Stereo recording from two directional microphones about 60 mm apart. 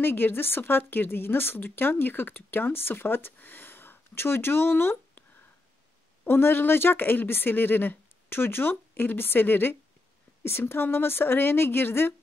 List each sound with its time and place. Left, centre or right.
0.0 s a woman's voice: left
6.2 s a woman's voice: left